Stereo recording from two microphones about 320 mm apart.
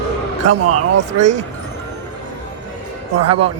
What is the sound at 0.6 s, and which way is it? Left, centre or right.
Speech, right.